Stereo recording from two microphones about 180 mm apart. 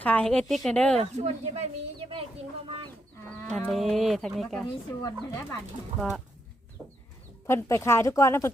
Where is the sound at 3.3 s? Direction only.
5° left (ahead or behind).